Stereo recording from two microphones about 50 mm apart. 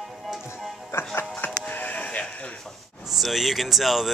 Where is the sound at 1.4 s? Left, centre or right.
Left.